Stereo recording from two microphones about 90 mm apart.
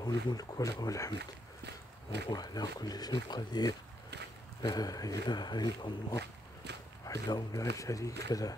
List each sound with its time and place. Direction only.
0.0 s speech: 45° left (ahead or behind)
2.3 s speech: 45° left (ahead or behind)
5.2 s speech: 55° left (ahead or behind)
7.1 s speech: 45° left (ahead or behind)